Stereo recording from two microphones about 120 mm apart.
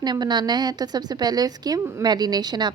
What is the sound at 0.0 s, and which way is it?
A woman's voice, 35° right (ahead or behind).